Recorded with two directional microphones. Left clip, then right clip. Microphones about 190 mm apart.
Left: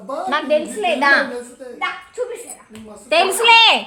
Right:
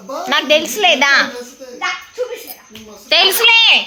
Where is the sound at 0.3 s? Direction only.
15° right (ahead or behind).